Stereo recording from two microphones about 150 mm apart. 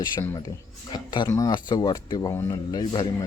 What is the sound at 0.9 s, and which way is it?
Speech, 30° left (ahead or behind).